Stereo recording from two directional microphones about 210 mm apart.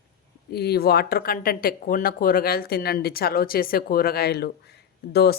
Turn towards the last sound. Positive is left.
turn(degrees=50)  # may be behind; listen again after turning